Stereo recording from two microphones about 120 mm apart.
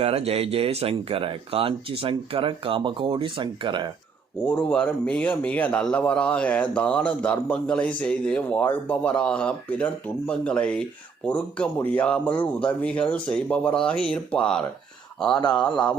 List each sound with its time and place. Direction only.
0.0 s speech: 55° right (ahead or behind)
4.4 s speech: 15° left (ahead or behind)